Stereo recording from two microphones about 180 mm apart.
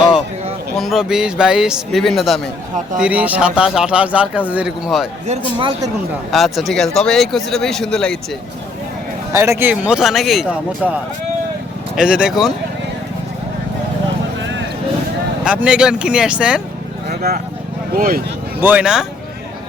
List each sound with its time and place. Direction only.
0.8 s speech: centre (ahead or behind)
5.5 s speech: 25° right (ahead or behind)
6.3 s speech: centre (ahead or behind)
9.3 s speech: 15° right (ahead or behind)
15.4 s speech: 5° right (ahead or behind)
17.1 s a sound: 60° right (ahead or behind)
17.9 s speech: 55° right (ahead or behind)
18.6 s speech: 10° right (ahead or behind)